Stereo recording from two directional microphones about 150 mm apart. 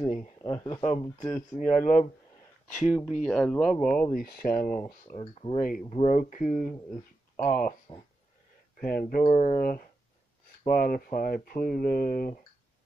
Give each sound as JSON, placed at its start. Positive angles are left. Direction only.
{"t": 0.5, "sound": "speech", "side_deg": 30}
{"t": 0.8, "sound": "speech", "side_deg": 50}
{"t": 2.8, "sound": "speech", "side_deg": 5}
{"t": 4.1, "sound": "speech", "side_deg": 85}
{"t": 5.2, "sound": "speech", "side_deg": 40}
{"t": 5.6, "sound": "speech", "side_deg": 70}
{"t": 5.9, "sound": "speech", "side_deg": 50}
{"t": 8.8, "sound": "speech", "side_deg": 75}
{"t": 9.3, "sound": "speech", "side_deg": 45}
{"t": 9.6, "sound": "speech", "side_deg": 70}